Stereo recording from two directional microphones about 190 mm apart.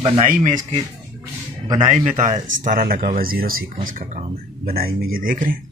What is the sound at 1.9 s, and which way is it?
Speech, 40° right (ahead or behind).